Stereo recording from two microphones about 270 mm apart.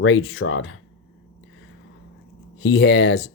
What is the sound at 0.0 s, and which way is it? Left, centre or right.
Speech, left.